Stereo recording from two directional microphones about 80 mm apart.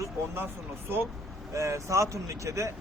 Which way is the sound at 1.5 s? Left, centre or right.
Right.